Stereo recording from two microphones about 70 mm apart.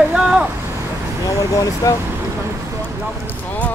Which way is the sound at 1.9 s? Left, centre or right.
Left.